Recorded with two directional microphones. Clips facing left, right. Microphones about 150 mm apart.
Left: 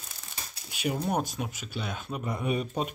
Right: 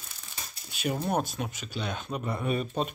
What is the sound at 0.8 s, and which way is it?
Speech, 10° left (ahead or behind).